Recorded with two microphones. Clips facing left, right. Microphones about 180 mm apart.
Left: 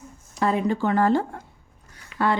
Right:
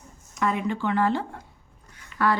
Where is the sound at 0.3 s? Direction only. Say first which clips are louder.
Left 4 dB; 35° left (ahead or behind).